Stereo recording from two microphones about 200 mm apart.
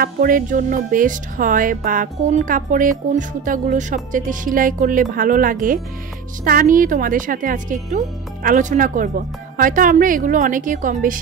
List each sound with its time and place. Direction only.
0.0 s speech: 45° right (ahead or behind)